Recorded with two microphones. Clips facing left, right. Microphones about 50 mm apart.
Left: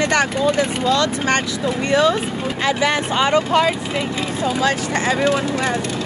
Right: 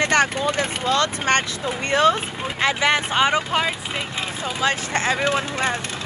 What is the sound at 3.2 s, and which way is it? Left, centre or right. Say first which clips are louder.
Speech: left 8 dB; centre.